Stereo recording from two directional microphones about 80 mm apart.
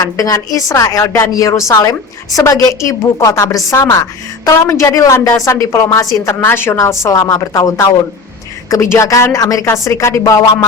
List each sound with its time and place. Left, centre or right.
0.0 s a woman's voice: left
6.4 s a woman's voice: left
6.7 s a woman's voice: left